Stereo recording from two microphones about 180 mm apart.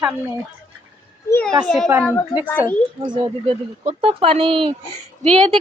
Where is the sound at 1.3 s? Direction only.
10° left (ahead or behind).